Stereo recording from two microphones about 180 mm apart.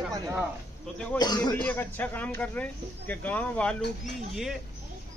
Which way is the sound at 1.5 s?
5° left (ahead or behind).